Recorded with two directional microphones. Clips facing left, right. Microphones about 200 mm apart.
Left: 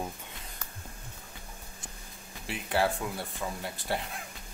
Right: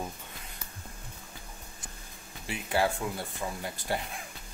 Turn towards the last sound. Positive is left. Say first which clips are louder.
# even
turn(degrees=0)  # may be behind; listen again after turning